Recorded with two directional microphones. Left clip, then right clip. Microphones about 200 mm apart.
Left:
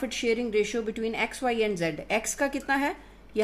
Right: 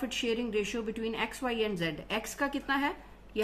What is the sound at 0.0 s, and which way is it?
A woman's voice, 25° left (ahead or behind).